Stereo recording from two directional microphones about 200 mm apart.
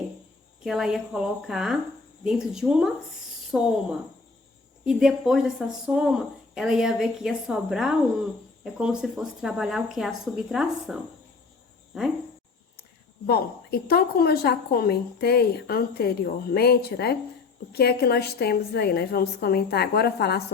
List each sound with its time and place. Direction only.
0.6 s speech: centre (ahead or behind)
4.9 s speech: centre (ahead or behind)
13.2 s a woman's voice: 50° left (ahead or behind)